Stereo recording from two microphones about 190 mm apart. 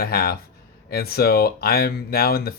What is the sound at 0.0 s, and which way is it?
Speech, 55° left (ahead or behind).